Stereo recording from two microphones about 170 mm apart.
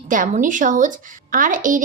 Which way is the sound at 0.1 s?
50° right (ahead or behind).